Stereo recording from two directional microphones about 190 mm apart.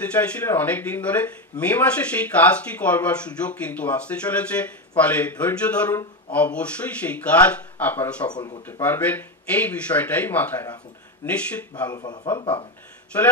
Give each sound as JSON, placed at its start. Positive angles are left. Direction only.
{"t": 0.0, "sound": "speech", "side_deg": 10}
{"t": 8.3, "sound": "speech", "side_deg": 20}
{"t": 8.8, "sound": "speech", "side_deg": 10}
{"t": 11.9, "sound": "speech", "side_deg": 20}
{"t": 13.1, "sound": "speech", "side_deg": 10}